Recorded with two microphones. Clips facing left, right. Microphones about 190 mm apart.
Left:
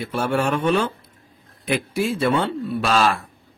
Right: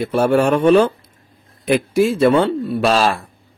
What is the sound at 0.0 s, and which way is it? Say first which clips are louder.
Speech: right 7 dB; 40° right (ahead or behind).